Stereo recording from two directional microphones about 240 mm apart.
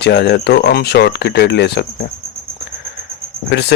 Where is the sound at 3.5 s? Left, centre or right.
Left.